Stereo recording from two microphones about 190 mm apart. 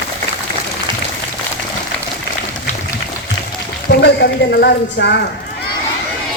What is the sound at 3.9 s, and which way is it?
A woman's voice, 60° left (ahead or behind).